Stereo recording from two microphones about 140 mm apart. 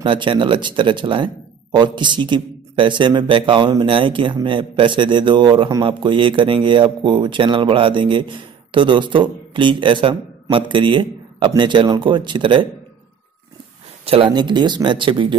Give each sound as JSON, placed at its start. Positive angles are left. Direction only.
{"t": 0.0, "sound": "a man's voice", "side_deg": -35}
{"t": 14.0, "sound": "a man's voice", "side_deg": -40}